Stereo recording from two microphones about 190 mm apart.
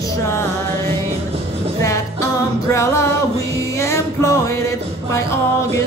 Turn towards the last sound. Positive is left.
turn(degrees=15)  # may be behind; listen again after turning